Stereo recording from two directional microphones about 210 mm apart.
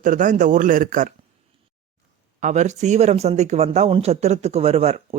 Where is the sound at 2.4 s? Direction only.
35° right (ahead or behind).